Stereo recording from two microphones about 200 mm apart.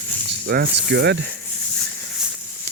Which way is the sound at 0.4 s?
55° right (ahead or behind).